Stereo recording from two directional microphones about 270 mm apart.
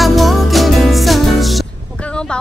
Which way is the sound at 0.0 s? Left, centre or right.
Centre.